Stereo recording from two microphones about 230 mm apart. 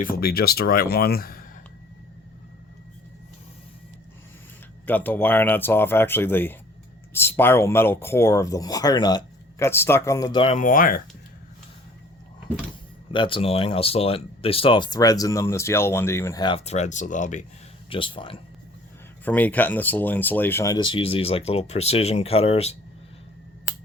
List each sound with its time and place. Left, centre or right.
0.0 s speech: left
4.9 s speech: centre; by 11.0 s left
13.1 s speech: left
17.8 s speech: left
19.2 s speech: centre; by 22.7 s left